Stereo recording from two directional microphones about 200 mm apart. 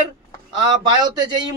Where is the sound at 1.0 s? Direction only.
20° right (ahead or behind).